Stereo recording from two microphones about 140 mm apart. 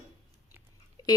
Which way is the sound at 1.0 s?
25° left (ahead or behind).